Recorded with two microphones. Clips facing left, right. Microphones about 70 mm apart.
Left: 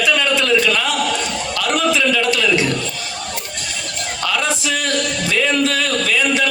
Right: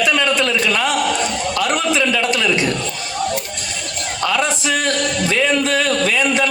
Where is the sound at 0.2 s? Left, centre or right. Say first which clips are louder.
Left 1 dB; right.